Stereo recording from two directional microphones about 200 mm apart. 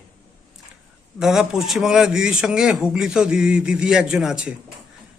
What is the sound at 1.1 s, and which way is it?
A man's voice, 5° right (ahead or behind).